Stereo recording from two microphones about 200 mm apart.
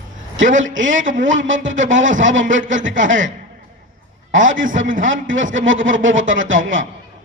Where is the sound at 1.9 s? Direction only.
70° right (ahead or behind).